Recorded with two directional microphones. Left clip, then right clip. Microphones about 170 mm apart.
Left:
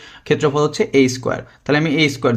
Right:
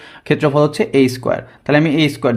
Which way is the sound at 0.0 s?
20° right (ahead or behind).